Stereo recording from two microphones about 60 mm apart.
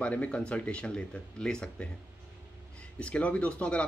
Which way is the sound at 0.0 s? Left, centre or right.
Left.